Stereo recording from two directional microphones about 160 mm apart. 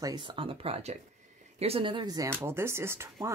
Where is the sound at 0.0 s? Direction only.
25° right (ahead or behind).